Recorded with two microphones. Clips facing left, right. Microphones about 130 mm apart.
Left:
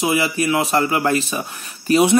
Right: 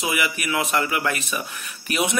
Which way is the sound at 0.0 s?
30° left (ahead or behind).